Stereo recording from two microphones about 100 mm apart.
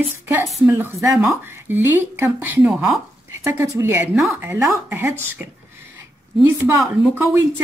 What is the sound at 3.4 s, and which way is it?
A woman's voice, 30° right (ahead or behind).